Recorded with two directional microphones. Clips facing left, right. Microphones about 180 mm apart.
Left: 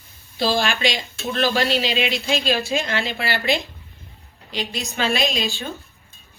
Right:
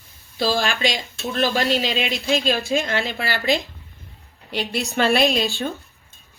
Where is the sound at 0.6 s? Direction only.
45° right (ahead or behind).